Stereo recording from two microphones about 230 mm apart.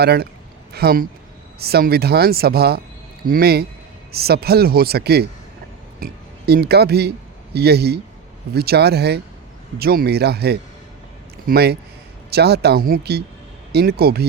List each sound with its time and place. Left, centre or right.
0.0 s speech: right